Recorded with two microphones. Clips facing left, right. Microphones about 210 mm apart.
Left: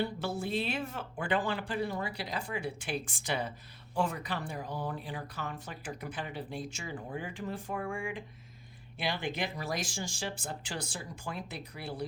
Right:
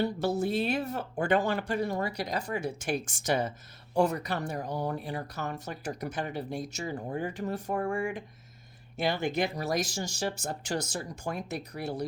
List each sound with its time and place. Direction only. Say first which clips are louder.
0.0 s speech: right 6 dB; 40° right (ahead or behind)